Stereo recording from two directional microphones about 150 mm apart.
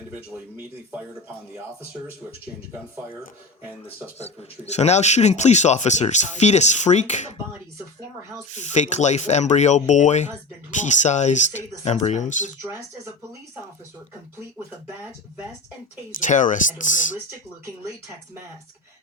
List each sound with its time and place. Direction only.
3.8 s speech: 45° left (ahead or behind)
8.5 s speech: 50° left (ahead or behind)
16.2 s speech: 60° left (ahead or behind)